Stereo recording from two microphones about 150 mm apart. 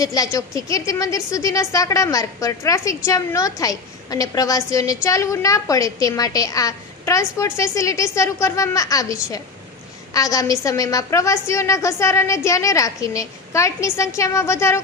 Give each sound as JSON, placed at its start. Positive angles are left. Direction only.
{"t": 0.0, "sound": "a woman's voice", "side_deg": 25}